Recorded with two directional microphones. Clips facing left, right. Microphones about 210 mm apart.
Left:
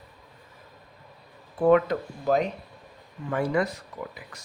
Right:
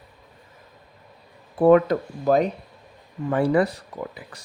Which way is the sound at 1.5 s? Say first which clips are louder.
Right 4 dB; 35° right (ahead or behind).